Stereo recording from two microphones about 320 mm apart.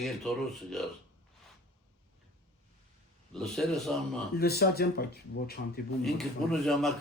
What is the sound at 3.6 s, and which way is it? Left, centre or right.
Speech, centre.